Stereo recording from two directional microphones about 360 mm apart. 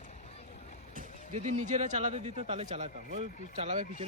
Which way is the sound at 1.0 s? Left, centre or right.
Right.